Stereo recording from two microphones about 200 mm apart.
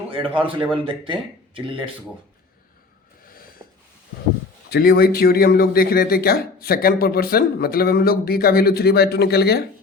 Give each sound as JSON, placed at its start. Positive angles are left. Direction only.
{"t": 0.3, "sound": "speech", "side_deg": -25}
{"t": 3.6, "sound": "a sound", "side_deg": -15}
{"t": 4.7, "sound": "a man's voice", "side_deg": 50}